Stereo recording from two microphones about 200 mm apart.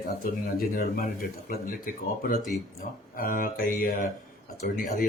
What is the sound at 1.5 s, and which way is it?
Speech, 45° left (ahead or behind).